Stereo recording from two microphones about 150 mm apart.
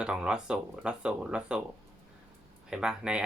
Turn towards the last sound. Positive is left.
turn(degrees=-5)  # may be behind; listen again after turning